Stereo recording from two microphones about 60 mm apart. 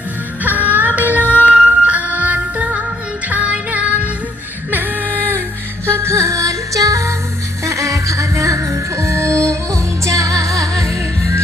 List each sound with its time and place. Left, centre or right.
0.4 s music: right
4.7 s female singing: right
5.8 s music: right